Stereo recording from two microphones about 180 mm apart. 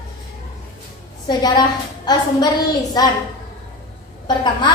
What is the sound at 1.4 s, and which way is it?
A woman's voice, 25° left (ahead or behind).